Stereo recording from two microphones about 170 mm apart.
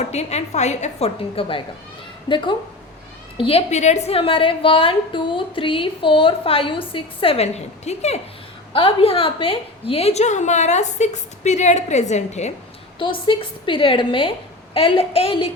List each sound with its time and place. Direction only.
0.0 s a woman's voice: 40° left (ahead or behind)
13.0 s a woman's voice: 30° left (ahead or behind)